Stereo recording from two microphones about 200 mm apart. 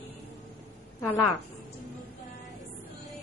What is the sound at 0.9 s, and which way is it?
Speech, 10° left (ahead or behind).